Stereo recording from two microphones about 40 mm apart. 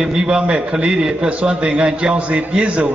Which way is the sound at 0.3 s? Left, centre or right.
Right.